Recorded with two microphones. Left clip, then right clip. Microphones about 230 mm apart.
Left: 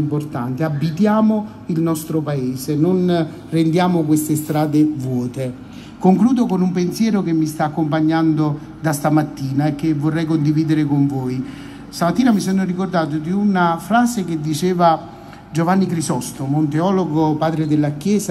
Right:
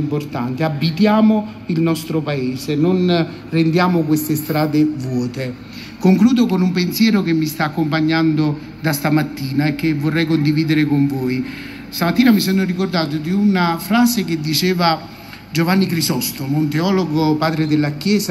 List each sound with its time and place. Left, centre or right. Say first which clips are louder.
0.1 s a man's voice: right 1 dB; left